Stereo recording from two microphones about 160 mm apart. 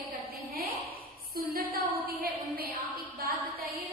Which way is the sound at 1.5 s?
70° right (ahead or behind).